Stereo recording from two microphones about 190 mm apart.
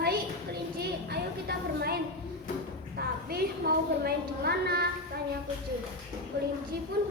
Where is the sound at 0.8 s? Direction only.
55° right (ahead or behind).